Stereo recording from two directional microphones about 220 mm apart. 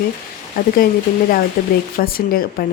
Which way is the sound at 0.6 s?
40° left (ahead or behind).